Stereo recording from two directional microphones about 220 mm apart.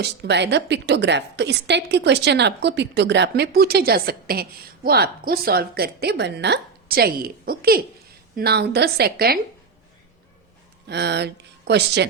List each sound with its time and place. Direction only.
0.0 s a woman's voice: 50° right (ahead or behind)
10.8 s speech: 50° right (ahead or behind)